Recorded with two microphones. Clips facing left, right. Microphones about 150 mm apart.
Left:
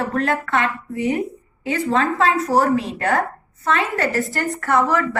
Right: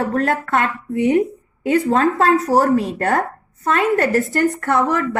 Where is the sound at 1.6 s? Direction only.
45° right (ahead or behind).